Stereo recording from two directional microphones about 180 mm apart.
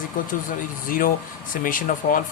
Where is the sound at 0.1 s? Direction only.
50° left (ahead or behind).